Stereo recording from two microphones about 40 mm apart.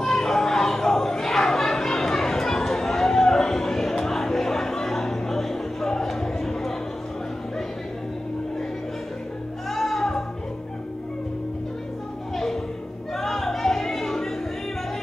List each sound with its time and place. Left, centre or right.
0.0 s chatter: centre
9.7 s music: centre
13.1 s music: centre